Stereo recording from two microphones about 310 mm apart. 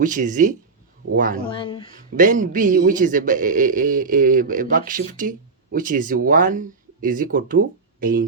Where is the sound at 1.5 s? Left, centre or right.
Centre.